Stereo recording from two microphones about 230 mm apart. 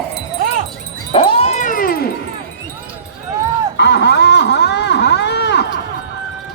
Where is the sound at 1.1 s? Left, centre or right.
Left.